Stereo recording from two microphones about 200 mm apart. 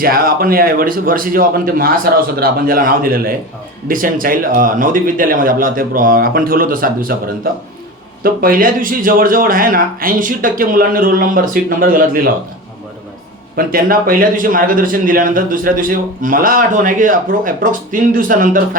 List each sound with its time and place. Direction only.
0.0 s a man's voice: 45° right (ahead or behind)
13.6 s a man's voice: 45° right (ahead or behind)